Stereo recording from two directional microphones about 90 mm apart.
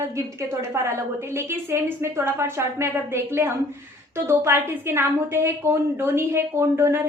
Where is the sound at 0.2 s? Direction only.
30° right (ahead or behind).